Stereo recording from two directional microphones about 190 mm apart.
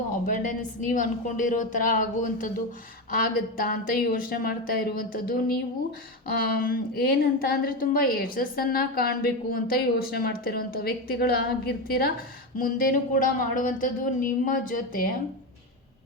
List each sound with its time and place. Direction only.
0.3 s a woman's voice: 45° left (ahead or behind)